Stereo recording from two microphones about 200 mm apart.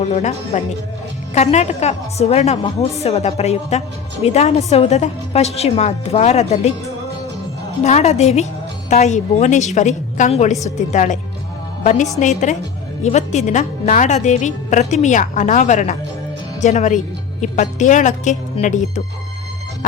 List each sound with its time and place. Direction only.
0.0 s a woman's voice: 35° left (ahead or behind)
7.9 s a woman's voice: 35° left (ahead or behind)